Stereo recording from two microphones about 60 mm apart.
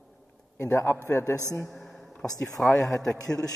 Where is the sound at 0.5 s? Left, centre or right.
Left.